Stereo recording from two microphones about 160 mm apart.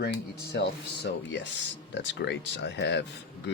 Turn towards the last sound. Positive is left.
turn(degrees=90)